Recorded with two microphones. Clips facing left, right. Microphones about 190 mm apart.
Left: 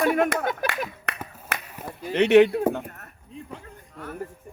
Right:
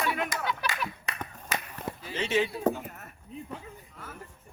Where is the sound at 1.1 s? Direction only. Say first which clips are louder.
Left 1 dB; 5° left (ahead or behind).